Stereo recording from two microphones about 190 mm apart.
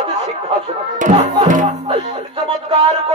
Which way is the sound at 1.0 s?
35° right (ahead or behind).